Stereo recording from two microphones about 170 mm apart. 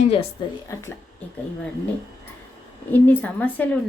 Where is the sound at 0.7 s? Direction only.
15° left (ahead or behind).